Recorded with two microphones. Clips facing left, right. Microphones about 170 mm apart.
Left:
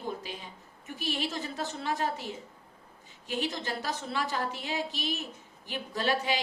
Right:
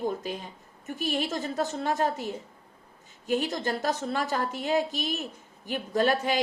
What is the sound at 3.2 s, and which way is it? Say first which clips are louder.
A woman's voice: right 6 dB; 50° right (ahead or behind).